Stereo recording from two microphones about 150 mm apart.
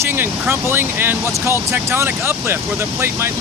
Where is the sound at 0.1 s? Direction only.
15° right (ahead or behind).